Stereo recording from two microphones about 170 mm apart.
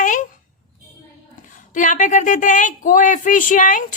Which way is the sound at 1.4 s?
50° left (ahead or behind).